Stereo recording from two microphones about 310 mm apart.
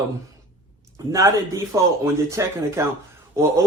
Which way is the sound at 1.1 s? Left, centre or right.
Centre.